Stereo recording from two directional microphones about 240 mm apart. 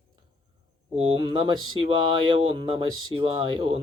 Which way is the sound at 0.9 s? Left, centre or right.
Right.